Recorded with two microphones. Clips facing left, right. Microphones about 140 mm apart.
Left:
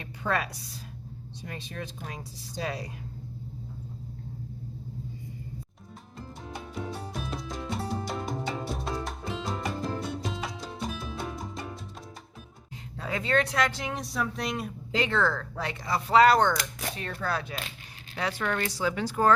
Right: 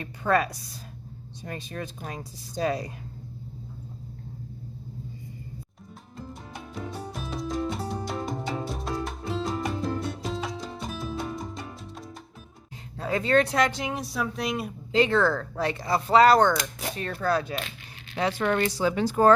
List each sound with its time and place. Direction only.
0.0 s speech: 45° right (ahead or behind)
5.9 s music: centre (ahead or behind)
13.1 s speech: 35° right (ahead or behind); by 13.9 s 20° right (ahead or behind)
13.9 s speech: 5° right (ahead or behind)
14.9 s speech: 35° right (ahead or behind)
18.1 s speech: 25° right (ahead or behind)